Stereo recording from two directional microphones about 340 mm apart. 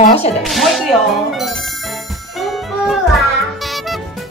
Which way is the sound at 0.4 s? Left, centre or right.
Centre.